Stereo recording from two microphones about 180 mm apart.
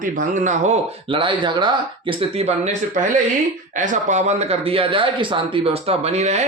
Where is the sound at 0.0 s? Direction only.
45° right (ahead or behind).